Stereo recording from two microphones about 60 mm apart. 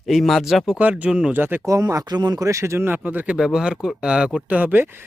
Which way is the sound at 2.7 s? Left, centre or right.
Right.